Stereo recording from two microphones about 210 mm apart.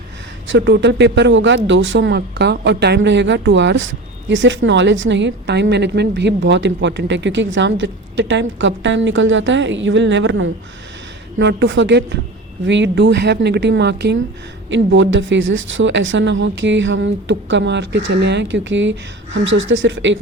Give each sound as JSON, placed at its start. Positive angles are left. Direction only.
{"t": 0.4, "sound": "a woman's voice", "side_deg": -60}